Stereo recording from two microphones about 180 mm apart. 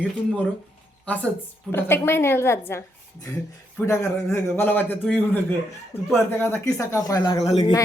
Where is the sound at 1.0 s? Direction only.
10° left (ahead or behind).